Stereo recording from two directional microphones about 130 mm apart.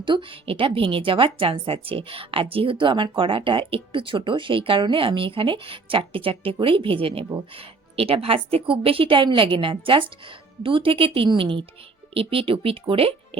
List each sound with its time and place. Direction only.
0.0 s a woman's voice: 40° right (ahead or behind)